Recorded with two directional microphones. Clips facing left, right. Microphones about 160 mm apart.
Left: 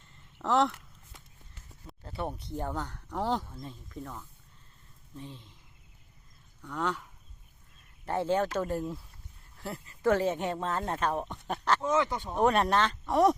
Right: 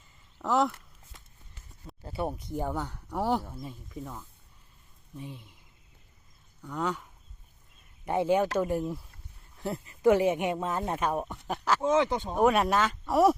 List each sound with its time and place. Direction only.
0.4 s speech: centre (ahead or behind)
2.0 s speech: 10° right (ahead or behind)
6.6 s speech: 5° right (ahead or behind)
11.8 s speech: 25° right (ahead or behind)
12.4 s speech: 5° right (ahead or behind)